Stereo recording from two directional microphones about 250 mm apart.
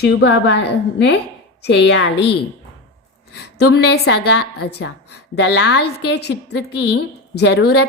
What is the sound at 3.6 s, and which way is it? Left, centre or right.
A woman's voice, left.